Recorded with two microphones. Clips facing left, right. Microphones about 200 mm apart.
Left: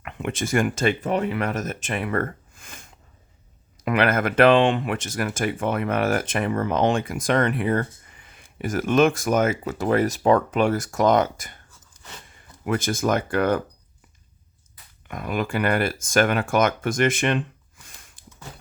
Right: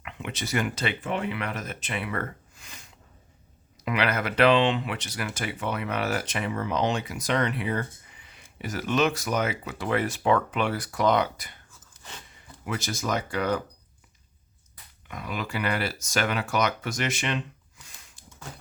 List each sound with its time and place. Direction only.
0.0 s speech: 50° left (ahead or behind)
15.0 s speech: 50° left (ahead or behind)